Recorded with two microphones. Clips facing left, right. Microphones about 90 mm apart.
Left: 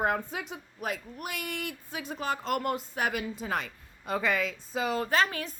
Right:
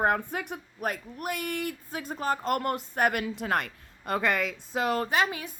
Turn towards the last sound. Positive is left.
turn(degrees=-15)  # may be behind; listen again after turning